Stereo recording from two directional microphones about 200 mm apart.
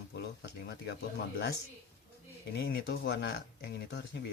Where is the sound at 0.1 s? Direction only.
55° left (ahead or behind).